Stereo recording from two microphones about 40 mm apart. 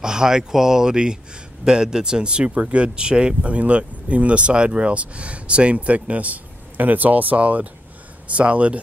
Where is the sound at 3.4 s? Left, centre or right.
Right.